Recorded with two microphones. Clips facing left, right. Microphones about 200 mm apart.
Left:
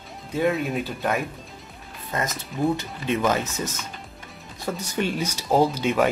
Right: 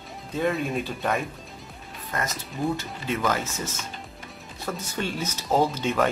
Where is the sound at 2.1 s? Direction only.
20° left (ahead or behind).